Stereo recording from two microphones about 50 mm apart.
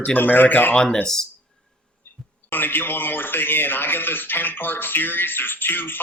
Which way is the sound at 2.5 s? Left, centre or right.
Left.